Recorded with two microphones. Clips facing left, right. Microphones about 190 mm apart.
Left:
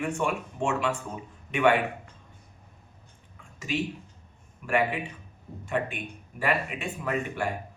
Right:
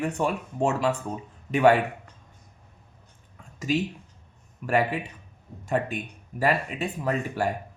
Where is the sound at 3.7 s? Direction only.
40° right (ahead or behind).